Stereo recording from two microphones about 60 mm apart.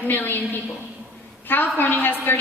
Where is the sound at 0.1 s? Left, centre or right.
Left.